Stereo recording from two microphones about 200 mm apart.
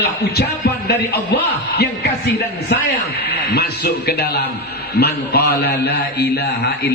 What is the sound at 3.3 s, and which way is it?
A man's voice, 55° left (ahead or behind).